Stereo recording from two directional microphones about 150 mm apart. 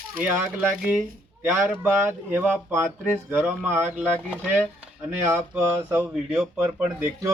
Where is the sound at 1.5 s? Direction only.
15° right (ahead or behind).